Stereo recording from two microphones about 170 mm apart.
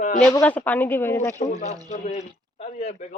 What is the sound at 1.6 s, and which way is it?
Speech, 40° left (ahead or behind).